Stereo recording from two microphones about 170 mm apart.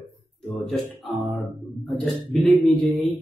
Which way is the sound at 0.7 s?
Centre (ahead or behind).